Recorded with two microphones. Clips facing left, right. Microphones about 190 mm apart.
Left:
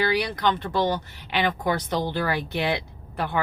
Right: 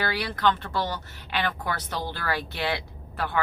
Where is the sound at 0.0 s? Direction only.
15° left (ahead or behind).